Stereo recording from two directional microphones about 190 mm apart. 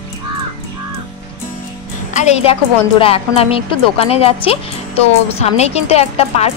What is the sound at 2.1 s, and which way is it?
A woman's voice, 35° left (ahead or behind).